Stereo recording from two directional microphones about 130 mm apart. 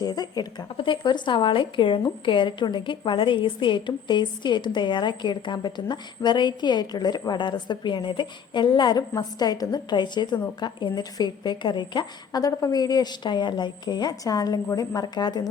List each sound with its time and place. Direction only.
0.0 s speech: 30° left (ahead or behind)